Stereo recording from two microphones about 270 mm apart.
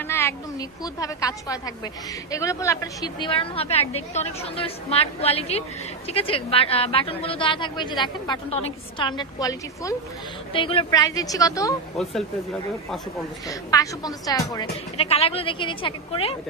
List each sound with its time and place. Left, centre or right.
0.0 s a woman's voice: centre
13.5 s a woman's voice: centre